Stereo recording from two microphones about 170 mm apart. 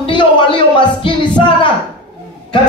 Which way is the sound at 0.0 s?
30° left (ahead or behind).